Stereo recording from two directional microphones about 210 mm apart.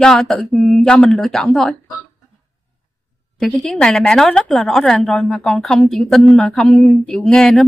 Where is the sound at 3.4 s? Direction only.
5° left (ahead or behind).